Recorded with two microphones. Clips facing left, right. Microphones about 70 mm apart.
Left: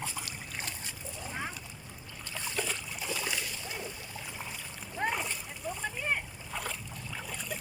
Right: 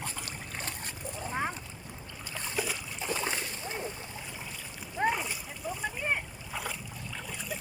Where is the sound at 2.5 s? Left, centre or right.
Centre.